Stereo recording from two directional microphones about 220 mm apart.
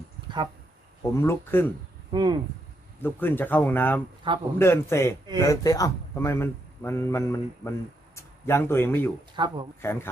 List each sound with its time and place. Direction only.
1.1 s a man's voice: 10° left (ahead or behind)
2.1 s speech: 20° right (ahead or behind)
3.0 s a man's voice: 10° left (ahead or behind)
9.3 s speech: 20° right (ahead or behind)
9.8 s a man's voice: 10° left (ahead or behind)